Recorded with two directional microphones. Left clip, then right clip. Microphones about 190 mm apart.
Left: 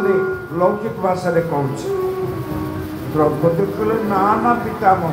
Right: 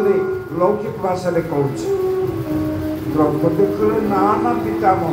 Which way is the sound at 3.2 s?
35° left (ahead or behind).